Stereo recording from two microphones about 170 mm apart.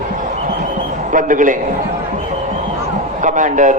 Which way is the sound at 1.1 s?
50° right (ahead or behind).